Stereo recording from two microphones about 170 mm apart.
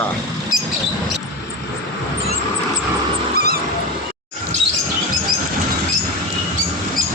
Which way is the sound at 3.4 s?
65° right (ahead or behind).